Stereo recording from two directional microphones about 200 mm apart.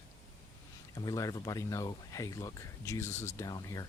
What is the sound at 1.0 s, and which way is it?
Speech, 15° left (ahead or behind).